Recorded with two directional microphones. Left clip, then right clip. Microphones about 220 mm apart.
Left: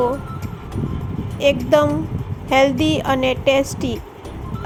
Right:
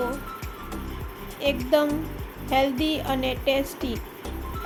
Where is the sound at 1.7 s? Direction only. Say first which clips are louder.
Left 6 dB; 30° left (ahead or behind).